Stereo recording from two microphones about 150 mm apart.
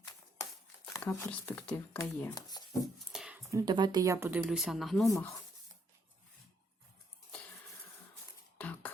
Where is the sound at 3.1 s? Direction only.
5° right (ahead or behind).